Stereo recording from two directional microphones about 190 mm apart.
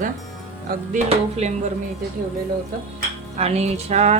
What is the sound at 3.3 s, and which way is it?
Speech, 35° right (ahead or behind).